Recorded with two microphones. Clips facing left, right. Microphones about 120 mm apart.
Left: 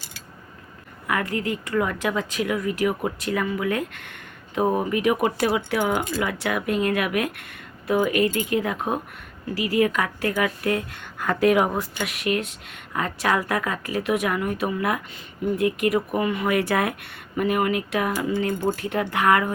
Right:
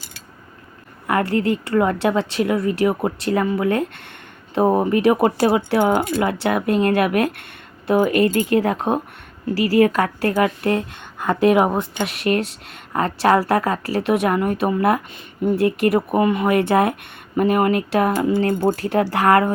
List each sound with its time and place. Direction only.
1.0 s a woman's voice: 35° right (ahead or behind)
17.3 s a woman's voice: 35° right (ahead or behind)